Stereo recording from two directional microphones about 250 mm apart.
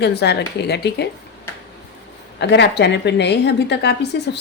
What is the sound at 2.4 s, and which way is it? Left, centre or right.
A woman's voice, left.